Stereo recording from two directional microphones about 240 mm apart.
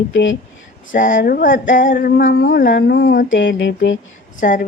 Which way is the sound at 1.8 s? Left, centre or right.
Left.